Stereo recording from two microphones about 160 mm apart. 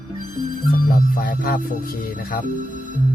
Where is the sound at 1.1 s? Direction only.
60° left (ahead or behind).